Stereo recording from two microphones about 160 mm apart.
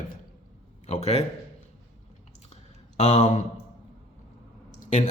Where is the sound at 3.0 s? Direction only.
45° left (ahead or behind).